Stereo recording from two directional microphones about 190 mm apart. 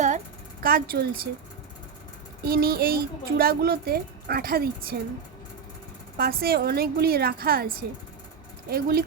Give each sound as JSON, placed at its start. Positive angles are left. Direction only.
{"t": 0.6, "sound": "speech", "side_deg": -50}
{"t": 2.4, "sound": "speech", "side_deg": -55}
{"t": 6.1, "sound": "speech", "side_deg": -55}